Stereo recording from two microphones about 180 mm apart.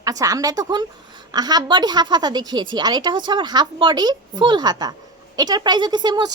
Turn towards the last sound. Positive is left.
turn(degrees=-25)  # may be behind; listen again after turning